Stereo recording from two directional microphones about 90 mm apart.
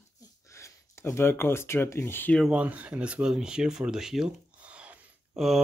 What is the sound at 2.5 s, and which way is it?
Speech, 15° right (ahead or behind).